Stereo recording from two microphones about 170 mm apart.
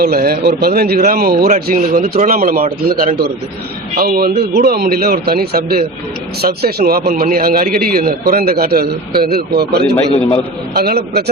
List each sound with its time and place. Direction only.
0.0 s a man's voice: 60° right (ahead or behind)
3.9 s a man's voice: 60° right (ahead or behind)